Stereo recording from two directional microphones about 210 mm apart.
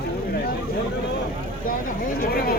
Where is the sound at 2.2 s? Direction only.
45° left (ahead or behind).